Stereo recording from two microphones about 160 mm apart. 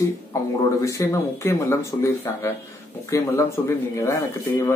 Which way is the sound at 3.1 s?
20° left (ahead or behind).